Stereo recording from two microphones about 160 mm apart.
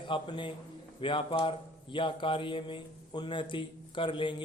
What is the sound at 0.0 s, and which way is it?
A man's voice, 30° left (ahead or behind).